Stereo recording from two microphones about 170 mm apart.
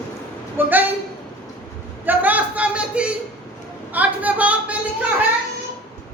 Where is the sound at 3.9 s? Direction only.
10° right (ahead or behind).